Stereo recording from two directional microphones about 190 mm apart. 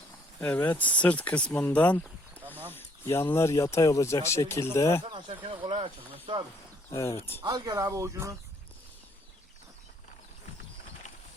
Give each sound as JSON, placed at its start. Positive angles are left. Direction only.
{"t": 0.3, "sound": "speech", "side_deg": 10}
{"t": 5.0, "sound": "speech", "side_deg": -25}
{"t": 6.9, "sound": "speech", "side_deg": 15}
{"t": 7.4, "sound": "speech", "side_deg": -20}